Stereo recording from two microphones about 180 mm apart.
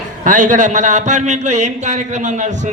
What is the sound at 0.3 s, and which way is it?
A man's voice, 45° right (ahead or behind).